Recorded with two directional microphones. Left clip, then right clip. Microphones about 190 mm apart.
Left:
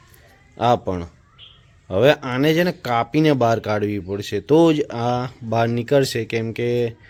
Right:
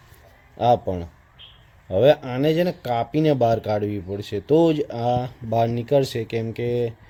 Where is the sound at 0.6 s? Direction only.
10° right (ahead or behind).